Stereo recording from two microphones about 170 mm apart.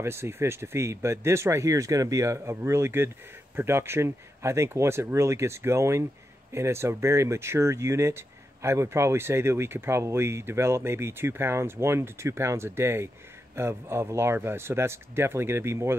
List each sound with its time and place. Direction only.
0.0 s speech: 15° right (ahead or behind)